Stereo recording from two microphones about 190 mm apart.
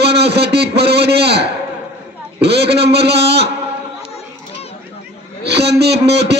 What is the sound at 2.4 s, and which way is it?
A man's voice, 60° right (ahead or behind).